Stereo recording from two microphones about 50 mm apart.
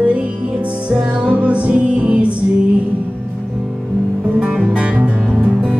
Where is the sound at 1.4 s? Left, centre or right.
Right.